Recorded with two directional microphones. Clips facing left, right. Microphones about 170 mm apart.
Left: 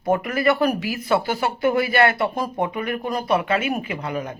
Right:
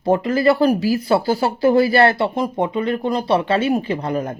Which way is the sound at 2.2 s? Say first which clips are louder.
Right 3 dB; 20° right (ahead or behind).